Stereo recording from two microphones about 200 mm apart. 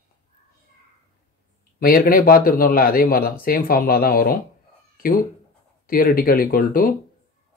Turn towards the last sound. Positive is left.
turn(degrees=45)  # may be behind; listen again after turning